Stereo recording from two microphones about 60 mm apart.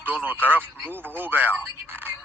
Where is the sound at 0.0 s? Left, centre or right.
Right.